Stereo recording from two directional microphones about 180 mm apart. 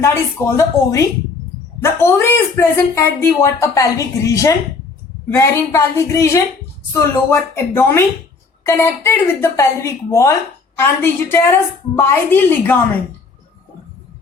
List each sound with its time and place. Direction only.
0.0 s speech: 15° left (ahead or behind)